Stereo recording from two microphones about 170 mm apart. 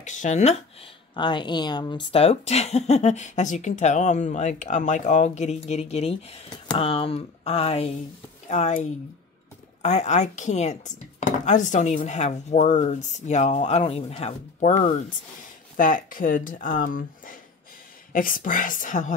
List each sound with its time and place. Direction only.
0.0 s speech: 45° left (ahead or behind)
1.1 s speech: 25° left (ahead or behind); by 19.1 s 50° left (ahead or behind)